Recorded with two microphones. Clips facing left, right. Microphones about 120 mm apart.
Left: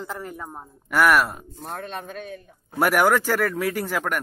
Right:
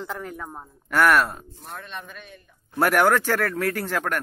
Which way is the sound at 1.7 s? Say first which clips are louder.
Left 4 dB; 45° left (ahead or behind).